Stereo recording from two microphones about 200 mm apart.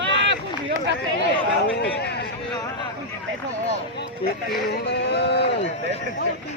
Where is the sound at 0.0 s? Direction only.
65° right (ahead or behind).